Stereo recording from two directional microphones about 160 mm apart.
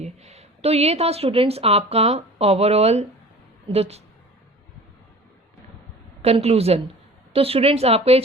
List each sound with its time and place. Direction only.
0.0 s a woman's voice: 40° right (ahead or behind)
6.2 s a woman's voice: 40° right (ahead or behind)